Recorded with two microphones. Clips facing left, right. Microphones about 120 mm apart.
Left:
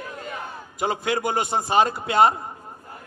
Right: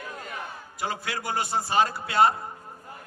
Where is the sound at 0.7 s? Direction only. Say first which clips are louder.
Left 8 dB; 20° left (ahead or behind).